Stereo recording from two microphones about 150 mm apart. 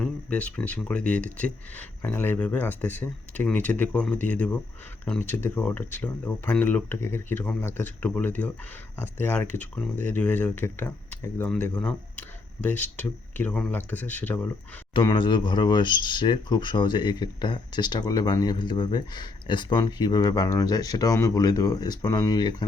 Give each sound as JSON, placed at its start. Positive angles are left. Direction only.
{"t": 0.0, "sound": "speech", "side_deg": 10}
{"t": 14.9, "sound": "speech", "side_deg": 35}